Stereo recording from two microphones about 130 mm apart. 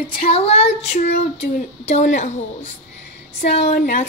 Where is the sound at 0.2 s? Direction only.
50° left (ahead or behind).